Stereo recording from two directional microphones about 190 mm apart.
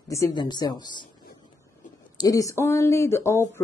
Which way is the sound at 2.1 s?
20° left (ahead or behind).